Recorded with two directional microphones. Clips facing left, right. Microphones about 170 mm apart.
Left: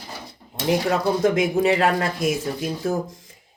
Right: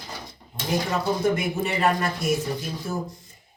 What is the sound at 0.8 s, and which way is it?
Speech, 90° left.